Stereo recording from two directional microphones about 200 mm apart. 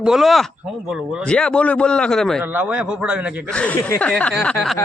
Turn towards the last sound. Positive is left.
turn(degrees=0)  # may be behind; listen again after turning